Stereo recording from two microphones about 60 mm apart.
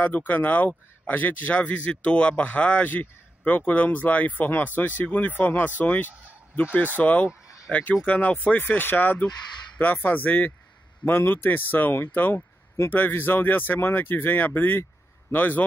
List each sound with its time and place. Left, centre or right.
0.3 s speech: left